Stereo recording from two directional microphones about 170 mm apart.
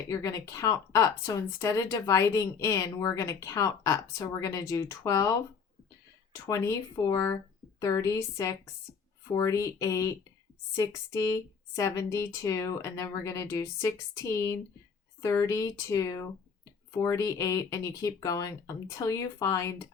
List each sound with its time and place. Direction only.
0.1 s speech: 20° left (ahead or behind)
6.3 s speech: 20° left (ahead or behind)